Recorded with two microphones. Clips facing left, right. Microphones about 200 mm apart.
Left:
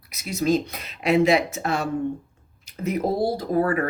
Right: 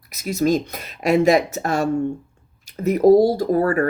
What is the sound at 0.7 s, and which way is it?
Speech, 45° right (ahead or behind).